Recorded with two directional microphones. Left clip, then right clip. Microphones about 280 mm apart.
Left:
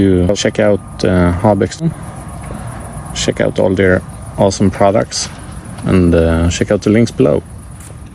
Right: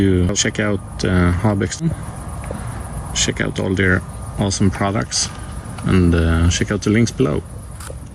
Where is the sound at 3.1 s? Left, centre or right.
Left.